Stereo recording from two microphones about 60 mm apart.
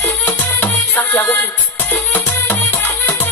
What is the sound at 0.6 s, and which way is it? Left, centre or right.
Music, left.